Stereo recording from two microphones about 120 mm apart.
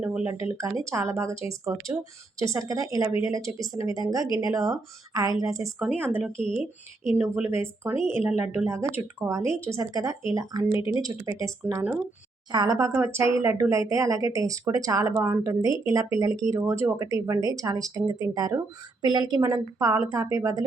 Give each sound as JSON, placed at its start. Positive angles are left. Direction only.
{"t": 0.0, "sound": "speech", "side_deg": -10}
{"t": 0.3, "sound": "speech", "side_deg": -25}
{"t": 7.0, "sound": "speech", "side_deg": -20}
{"t": 12.5, "sound": "speech", "side_deg": -35}